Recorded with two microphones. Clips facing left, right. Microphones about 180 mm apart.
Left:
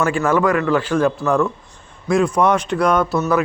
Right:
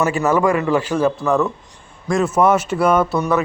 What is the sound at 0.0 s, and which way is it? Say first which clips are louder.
A man's voice: even; 5° right (ahead or behind).